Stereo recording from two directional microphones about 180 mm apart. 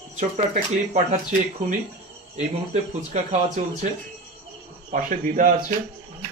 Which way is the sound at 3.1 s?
45° right (ahead or behind).